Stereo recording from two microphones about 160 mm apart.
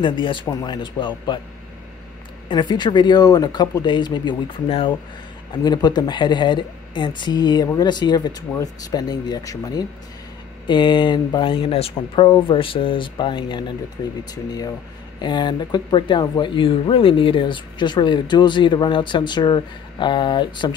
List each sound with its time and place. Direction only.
0.0 s speech: 30° left (ahead or behind)
2.4 s speech: 30° left (ahead or behind)